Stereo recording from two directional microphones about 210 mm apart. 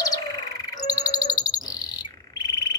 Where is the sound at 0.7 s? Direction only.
20° left (ahead or behind).